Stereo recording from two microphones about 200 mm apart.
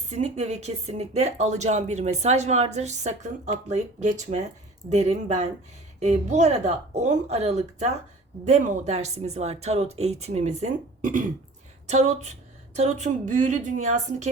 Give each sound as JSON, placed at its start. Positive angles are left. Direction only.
{"t": 0.1, "sound": "speech", "side_deg": -35}